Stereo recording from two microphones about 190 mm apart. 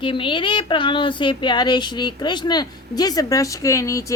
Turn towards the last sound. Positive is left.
turn(degrees=15)  # may be behind; listen again after turning